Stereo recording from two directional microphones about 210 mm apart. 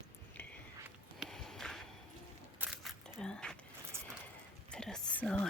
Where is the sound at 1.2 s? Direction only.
Centre (ahead or behind).